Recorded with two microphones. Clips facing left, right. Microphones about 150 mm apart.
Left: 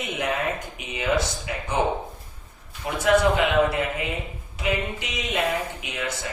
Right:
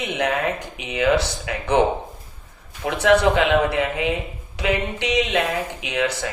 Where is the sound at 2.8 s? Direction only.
80° right.